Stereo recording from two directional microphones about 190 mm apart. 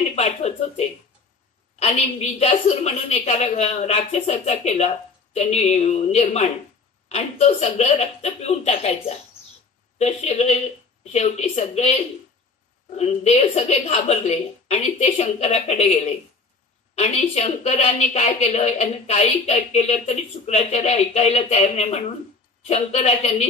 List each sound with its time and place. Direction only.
0.1 s a woman's voice: 35° left (ahead or behind)